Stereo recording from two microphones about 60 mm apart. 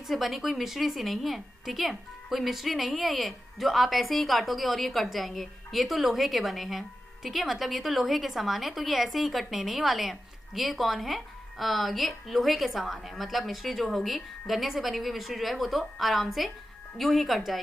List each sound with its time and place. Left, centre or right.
0.0 s a woman's voice: centre